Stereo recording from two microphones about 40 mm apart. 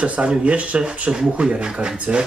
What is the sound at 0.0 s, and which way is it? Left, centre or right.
Speech, right.